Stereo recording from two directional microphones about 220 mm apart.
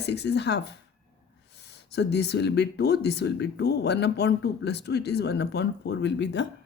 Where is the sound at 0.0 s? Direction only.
50° left (ahead or behind).